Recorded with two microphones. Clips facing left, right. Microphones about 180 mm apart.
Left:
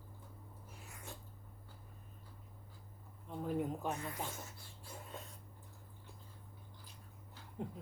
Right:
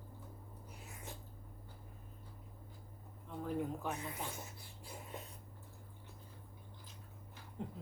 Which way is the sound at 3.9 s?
20° right (ahead or behind).